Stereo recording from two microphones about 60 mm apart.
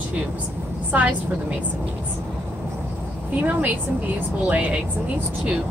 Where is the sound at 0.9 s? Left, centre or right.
Right.